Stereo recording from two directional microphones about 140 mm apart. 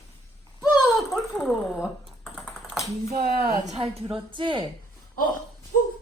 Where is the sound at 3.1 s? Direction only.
90° right.